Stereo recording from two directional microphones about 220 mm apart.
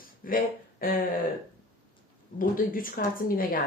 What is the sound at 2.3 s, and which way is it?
Speech, 40° left (ahead or behind).